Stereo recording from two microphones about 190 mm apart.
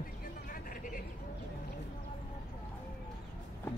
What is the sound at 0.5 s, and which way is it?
Vehicle, 45° left (ahead or behind).